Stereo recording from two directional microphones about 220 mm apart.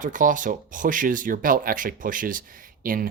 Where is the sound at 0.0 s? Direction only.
35° right (ahead or behind).